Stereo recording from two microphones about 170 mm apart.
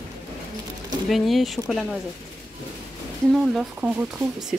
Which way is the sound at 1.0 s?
Centre (ahead or behind).